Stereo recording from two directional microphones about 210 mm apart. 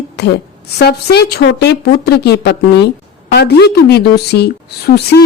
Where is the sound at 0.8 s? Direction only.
50° left (ahead or behind).